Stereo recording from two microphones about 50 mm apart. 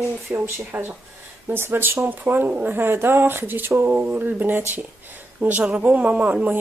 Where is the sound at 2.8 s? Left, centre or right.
Right.